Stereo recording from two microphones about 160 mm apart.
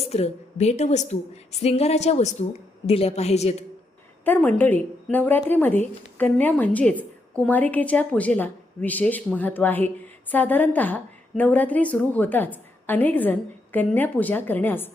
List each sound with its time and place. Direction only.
0.1 s a woman's voice: 40° left (ahead or behind)
4.3 s a woman's voice: 10° left (ahead or behind)